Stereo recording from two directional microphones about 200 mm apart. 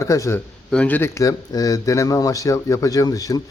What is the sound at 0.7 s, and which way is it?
Speech, 5° left (ahead or behind).